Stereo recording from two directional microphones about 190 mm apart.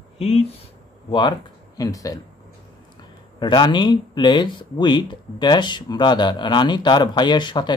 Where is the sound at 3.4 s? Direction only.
25° left (ahead or behind).